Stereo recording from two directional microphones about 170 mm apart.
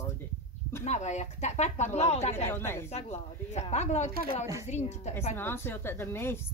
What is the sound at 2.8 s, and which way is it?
Speech, 40° left (ahead or behind).